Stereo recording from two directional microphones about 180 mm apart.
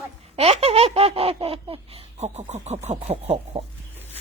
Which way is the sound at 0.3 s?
35° right (ahead or behind).